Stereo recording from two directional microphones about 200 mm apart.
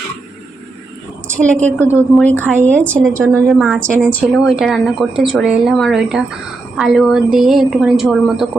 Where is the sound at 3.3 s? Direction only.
15° right (ahead or behind).